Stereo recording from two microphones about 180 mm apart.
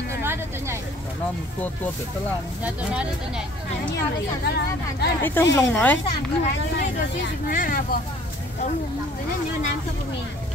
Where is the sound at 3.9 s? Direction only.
65° left (ahead or behind).